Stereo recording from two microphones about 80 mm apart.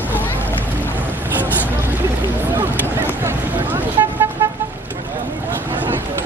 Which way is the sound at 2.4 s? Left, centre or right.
Right.